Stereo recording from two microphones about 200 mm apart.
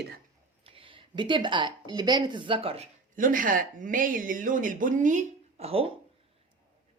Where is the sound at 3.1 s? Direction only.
40° right (ahead or behind).